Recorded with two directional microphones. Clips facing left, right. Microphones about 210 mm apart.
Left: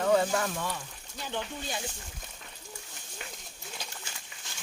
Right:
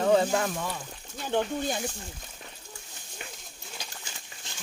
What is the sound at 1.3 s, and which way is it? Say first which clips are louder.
Speech: right 9 dB; 50° right (ahead or behind).